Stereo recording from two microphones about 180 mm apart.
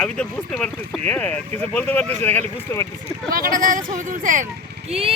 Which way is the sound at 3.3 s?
50° right (ahead or behind).